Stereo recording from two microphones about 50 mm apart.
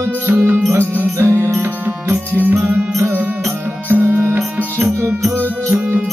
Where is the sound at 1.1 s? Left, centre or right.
Right.